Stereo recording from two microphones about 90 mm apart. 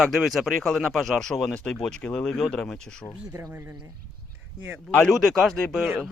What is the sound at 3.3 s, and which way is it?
Speech, 40° right (ahead or behind).